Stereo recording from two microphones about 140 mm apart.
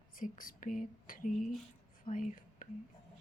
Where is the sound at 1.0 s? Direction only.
80° left.